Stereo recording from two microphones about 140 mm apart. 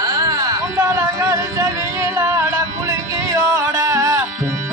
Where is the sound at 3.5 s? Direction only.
25° right (ahead or behind).